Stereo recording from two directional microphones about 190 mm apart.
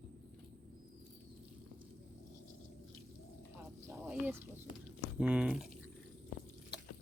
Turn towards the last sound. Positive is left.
turn(degrees=-5)  # may be behind; listen again after turning